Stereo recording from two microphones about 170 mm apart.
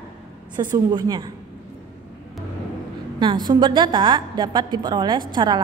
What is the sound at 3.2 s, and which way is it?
A woman's voice, 25° right (ahead or behind).